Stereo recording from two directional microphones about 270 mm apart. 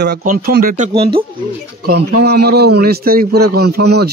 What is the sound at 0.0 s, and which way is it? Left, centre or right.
A man's voice, right.